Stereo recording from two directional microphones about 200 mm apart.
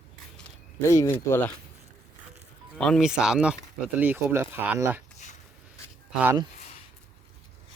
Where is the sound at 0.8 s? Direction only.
15° left (ahead or behind).